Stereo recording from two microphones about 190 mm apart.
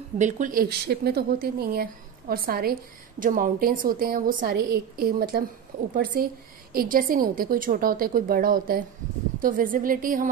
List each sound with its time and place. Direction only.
0.2 s a woman's voice: 45° right (ahead or behind)